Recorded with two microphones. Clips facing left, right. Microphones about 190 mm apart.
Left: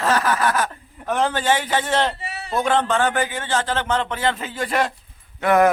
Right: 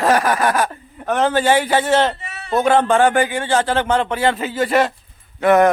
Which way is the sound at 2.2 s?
30° left (ahead or behind).